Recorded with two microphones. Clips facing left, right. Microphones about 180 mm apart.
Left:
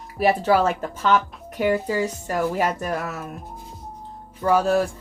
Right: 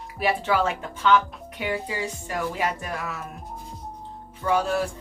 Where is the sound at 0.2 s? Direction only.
40° left (ahead or behind).